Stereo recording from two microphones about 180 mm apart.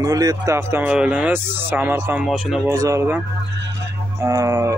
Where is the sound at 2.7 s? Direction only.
15° right (ahead or behind).